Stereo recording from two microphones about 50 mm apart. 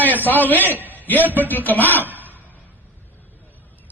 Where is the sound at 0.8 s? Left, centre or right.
Left.